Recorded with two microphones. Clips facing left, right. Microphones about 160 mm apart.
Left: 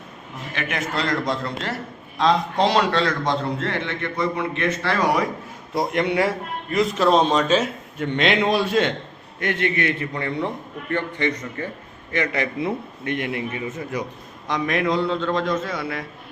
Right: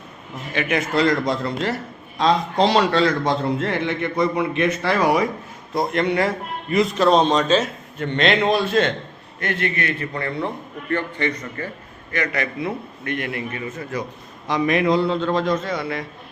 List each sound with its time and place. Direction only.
0.5 s a man's voice: 5° right (ahead or behind)
5.7 s a man's voice: 10° left (ahead or behind)
14.4 s a man's voice: centre (ahead or behind)